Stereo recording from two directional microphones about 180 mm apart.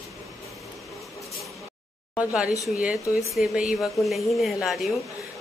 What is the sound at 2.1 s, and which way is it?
Speech, 5° right (ahead or behind).